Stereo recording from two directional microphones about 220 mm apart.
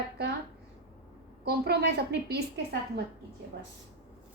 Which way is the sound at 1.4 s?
50° right (ahead or behind).